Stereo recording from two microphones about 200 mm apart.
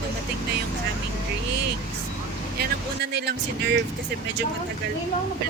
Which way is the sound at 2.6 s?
55° right (ahead or behind).